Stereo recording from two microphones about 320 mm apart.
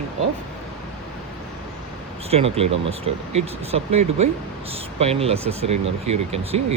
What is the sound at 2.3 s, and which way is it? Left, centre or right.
Speech, centre.